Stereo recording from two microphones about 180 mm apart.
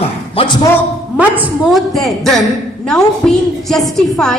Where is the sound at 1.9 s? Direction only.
Centre (ahead or behind).